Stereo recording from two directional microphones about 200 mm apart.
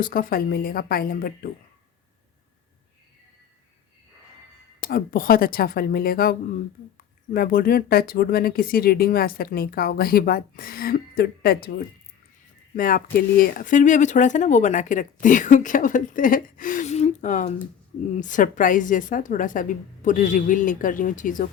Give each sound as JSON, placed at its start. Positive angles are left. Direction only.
{"t": 0.0, "sound": "speech", "side_deg": 45}
{"t": 4.8, "sound": "speech", "side_deg": 45}